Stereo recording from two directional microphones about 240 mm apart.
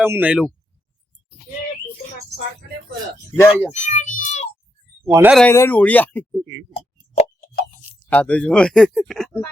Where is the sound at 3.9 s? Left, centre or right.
Left.